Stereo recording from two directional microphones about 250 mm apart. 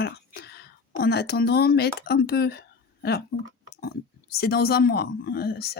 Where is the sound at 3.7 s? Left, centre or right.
Left.